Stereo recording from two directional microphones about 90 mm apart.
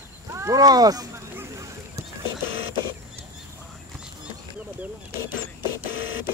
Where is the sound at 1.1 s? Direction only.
30° right (ahead or behind).